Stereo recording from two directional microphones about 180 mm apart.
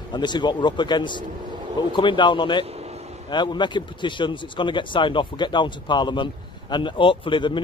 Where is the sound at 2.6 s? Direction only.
35° right (ahead or behind).